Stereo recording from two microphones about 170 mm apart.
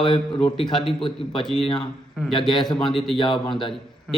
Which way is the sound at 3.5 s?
30° left (ahead or behind).